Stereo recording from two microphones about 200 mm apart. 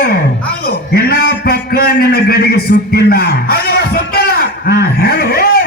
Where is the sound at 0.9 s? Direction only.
50° left (ahead or behind).